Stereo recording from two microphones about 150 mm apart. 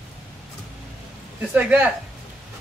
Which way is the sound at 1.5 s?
10° right (ahead or behind).